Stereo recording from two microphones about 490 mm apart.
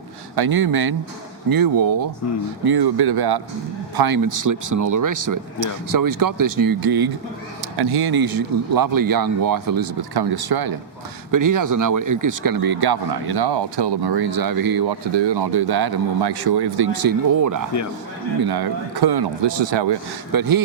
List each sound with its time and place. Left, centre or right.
0.3 s speech: right
20.3 s speech: right